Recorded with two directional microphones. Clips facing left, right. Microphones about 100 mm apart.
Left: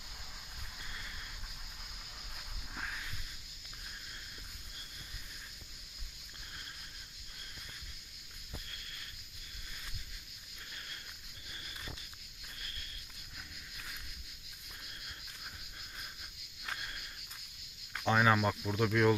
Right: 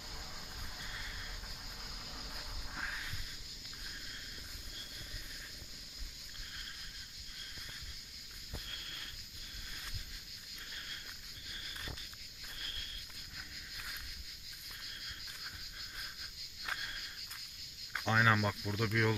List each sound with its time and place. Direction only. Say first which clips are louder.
18.0 s speech: left 3 dB; 10° left (ahead or behind)
18.6 s speech: left 5 dB; 20° left (ahead or behind)